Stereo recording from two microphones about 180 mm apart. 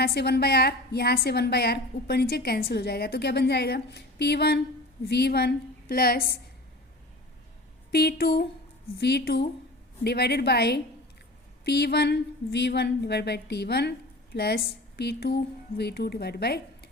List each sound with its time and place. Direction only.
0.0 s a woman's voice: 65° left (ahead or behind)
7.9 s a woman's voice: 60° left (ahead or behind)